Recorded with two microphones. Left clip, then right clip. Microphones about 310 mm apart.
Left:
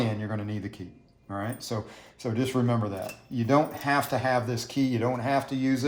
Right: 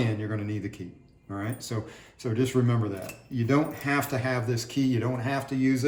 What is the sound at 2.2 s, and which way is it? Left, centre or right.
Speech, centre.